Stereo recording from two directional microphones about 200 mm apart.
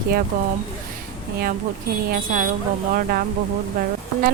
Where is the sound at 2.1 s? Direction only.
45° right (ahead or behind).